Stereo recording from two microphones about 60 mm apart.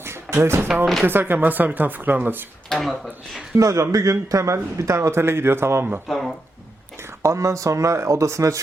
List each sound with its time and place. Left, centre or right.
0.0 s a sound: right
1.0 s speech: right
2.6 s speech: centre
3.6 s speech: right
6.1 s speech: centre
7.2 s speech: right